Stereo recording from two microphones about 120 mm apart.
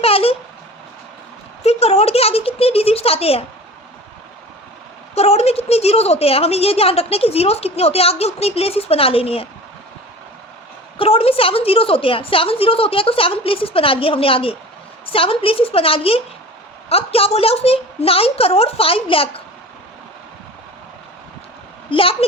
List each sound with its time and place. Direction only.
0.0 s a sound: 55° left (ahead or behind)
1.6 s speech: 60° left (ahead or behind)
5.1 s a woman's voice: 60° left (ahead or behind)
10.9 s a woman's voice: 55° left (ahead or behind)
21.8 s a woman's voice: 50° left (ahead or behind)